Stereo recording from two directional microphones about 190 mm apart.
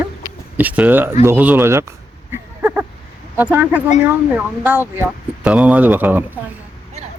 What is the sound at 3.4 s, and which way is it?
A man's voice, 10° right (ahead or behind).